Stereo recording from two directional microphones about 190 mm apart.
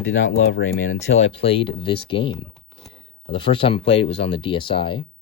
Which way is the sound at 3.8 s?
70° left (ahead or behind).